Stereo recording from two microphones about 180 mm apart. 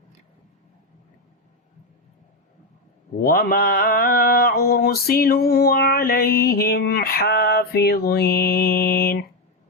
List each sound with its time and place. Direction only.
3.2 s mantra: 55° left (ahead or behind)